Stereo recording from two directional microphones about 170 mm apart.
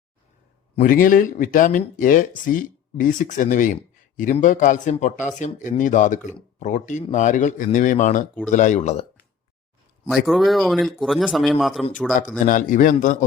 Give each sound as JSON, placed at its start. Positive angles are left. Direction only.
{"t": 0.8, "sound": "speech", "side_deg": 55}
{"t": 10.2, "sound": "a man's voice", "side_deg": 0}
{"t": 12.5, "sound": "speech", "side_deg": 50}